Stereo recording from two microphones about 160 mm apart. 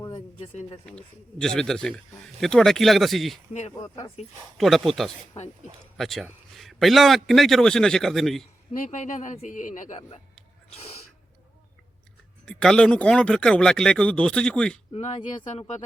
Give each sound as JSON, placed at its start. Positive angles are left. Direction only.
{"t": 0.3, "sound": "speech", "side_deg": 40}
{"t": 0.9, "sound": "speech", "side_deg": 5}
{"t": 4.5, "sound": "speech", "side_deg": 0}
{"t": 8.9, "sound": "speech", "side_deg": 50}
{"t": 12.5, "sound": "speech", "side_deg": 5}
{"t": 14.9, "sound": "speech", "side_deg": 40}